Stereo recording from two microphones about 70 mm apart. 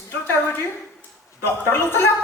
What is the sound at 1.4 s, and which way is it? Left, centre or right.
Speech, left.